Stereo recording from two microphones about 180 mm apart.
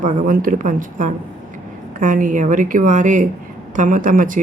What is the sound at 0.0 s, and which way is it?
Speech, 45° right (ahead or behind).